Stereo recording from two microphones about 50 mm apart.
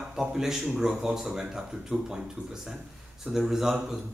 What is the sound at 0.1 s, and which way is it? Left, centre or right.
Speech, centre.